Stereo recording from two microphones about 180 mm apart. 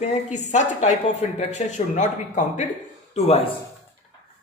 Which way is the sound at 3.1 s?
35° left (ahead or behind).